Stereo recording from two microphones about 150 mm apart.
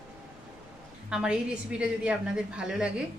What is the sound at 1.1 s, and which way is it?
A woman's voice, 5° right (ahead or behind).